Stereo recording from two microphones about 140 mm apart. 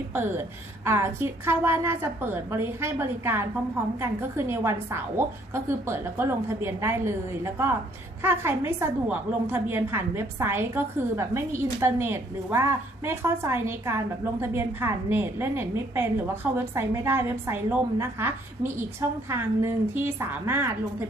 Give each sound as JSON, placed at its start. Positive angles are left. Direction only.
{"t": 0.1, "sound": "a woman's voice", "side_deg": -15}